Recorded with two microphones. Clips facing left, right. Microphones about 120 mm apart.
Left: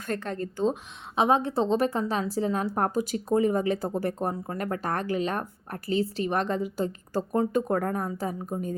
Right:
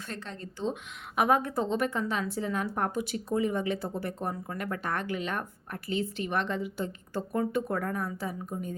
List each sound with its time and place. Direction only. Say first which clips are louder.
0.1 s a woman's voice: left 12 dB; 50° left (ahead or behind)
1.1 s a woman's voice: left 3 dB; 25° left (ahead or behind); by 8.7 s 40° left (ahead or behind)